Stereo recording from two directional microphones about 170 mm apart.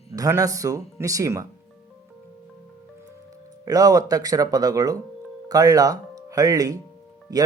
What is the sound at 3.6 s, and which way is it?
Speech, 20° right (ahead or behind).